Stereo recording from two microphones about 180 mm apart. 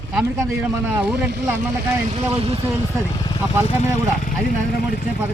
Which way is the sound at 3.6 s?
40° left (ahead or behind).